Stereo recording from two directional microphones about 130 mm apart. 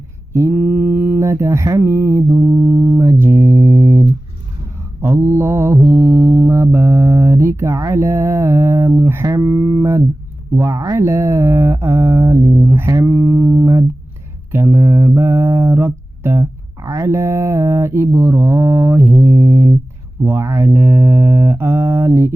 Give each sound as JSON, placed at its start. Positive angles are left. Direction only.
{"t": 0.3, "sound": "mantra", "side_deg": -20}
{"t": 14.5, "sound": "music", "side_deg": -15}
{"t": 20.2, "sound": "mantra", "side_deg": -20}